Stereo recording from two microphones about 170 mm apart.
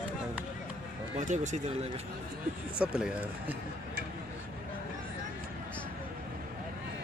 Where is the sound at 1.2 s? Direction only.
45° right (ahead or behind).